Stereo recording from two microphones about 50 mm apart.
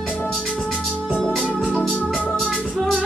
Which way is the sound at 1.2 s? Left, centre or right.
Centre.